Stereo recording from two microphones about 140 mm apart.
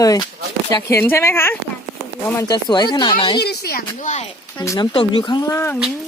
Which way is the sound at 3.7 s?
90° left.